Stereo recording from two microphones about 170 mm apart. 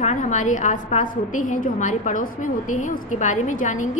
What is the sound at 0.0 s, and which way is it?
A woman's voice, 45° left (ahead or behind).